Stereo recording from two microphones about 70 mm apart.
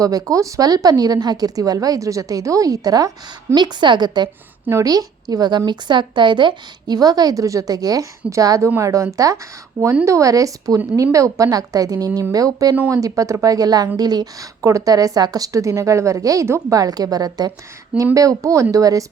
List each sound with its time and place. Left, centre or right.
0.0 s a woman's voice: right
3.5 s speech: right
4.7 s a woman's voice: right
5.3 s speech: right
6.8 s a woman's voice: right
12.3 s a woman's voice: right
14.6 s a woman's voice: right
16.7 s a woman's voice: right
17.9 s a woman's voice: right